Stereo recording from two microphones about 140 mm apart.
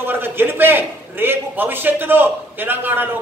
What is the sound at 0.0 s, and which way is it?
A man's voice, 15° right (ahead or behind).